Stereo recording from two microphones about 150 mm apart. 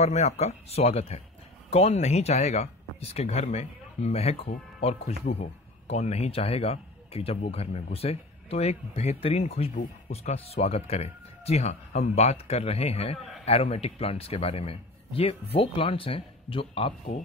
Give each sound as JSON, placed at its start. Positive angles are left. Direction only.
{"t": 0.0, "sound": "speech", "side_deg": 45}